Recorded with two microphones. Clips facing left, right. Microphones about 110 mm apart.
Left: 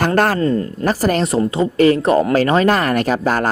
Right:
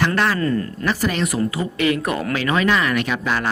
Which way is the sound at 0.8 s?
40° left (ahead or behind).